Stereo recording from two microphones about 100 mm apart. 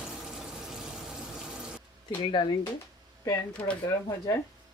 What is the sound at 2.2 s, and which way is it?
Speech, 50° left (ahead or behind).